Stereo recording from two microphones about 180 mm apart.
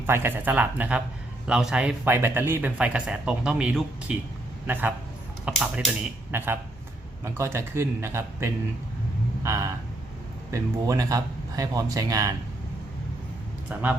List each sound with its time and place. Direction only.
0.0 s speech: 15° right (ahead or behind)